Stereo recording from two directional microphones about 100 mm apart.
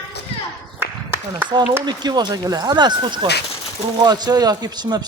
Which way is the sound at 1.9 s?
45° right (ahead or behind).